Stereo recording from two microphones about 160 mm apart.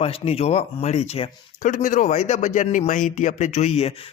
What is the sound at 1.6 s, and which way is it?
Speech, 55° left (ahead or behind).